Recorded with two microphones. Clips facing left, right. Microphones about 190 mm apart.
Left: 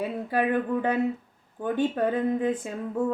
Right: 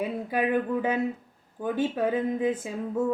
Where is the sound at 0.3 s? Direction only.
10° right (ahead or behind).